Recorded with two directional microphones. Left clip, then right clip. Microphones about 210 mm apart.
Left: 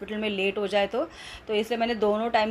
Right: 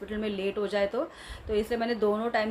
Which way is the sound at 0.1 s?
10° left (ahead or behind).